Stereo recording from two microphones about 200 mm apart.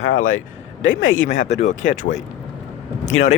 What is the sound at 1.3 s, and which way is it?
Speech, 35° left (ahead or behind).